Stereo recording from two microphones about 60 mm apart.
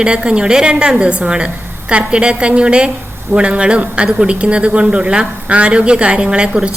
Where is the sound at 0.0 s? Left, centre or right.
Centre.